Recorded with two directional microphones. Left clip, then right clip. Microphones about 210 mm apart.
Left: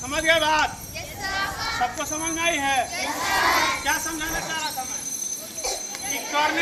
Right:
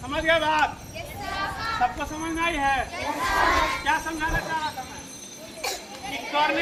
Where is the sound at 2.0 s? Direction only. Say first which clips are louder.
Left 2 dB; 15° left (ahead or behind).